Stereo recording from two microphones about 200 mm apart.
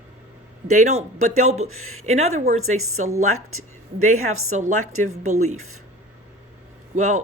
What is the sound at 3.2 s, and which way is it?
Speech, 90° right.